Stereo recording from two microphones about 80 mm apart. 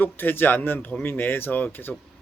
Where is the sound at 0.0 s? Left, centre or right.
Left.